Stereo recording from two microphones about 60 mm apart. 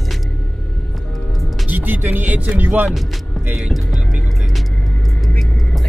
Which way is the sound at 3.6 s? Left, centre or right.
Centre.